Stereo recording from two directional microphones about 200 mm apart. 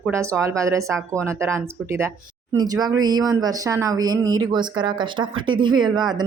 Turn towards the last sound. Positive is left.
turn(degrees=-20)  # may be behind; listen again after turning